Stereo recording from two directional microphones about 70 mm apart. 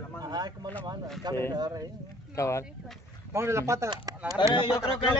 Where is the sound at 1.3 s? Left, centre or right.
Right.